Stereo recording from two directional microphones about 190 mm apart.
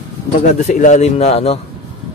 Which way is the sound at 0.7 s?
40° left (ahead or behind).